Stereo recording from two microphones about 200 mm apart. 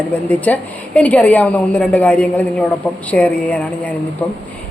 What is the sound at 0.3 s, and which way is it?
Speech, 10° left (ahead or behind).